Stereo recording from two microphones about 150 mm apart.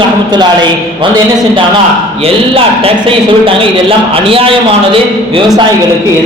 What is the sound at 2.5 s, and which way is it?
A woman's voice, 40° right (ahead or behind).